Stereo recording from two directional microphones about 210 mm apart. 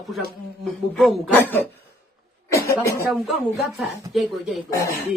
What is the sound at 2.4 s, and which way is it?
Speech, 15° left (ahead or behind).